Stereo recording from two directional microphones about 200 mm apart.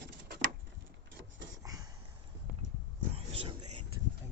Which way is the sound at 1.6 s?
15° right (ahead or behind).